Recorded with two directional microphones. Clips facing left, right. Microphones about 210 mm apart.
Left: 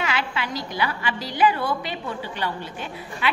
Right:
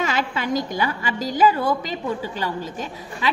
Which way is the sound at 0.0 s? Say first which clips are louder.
Right 3 dB; 45° right (ahead or behind).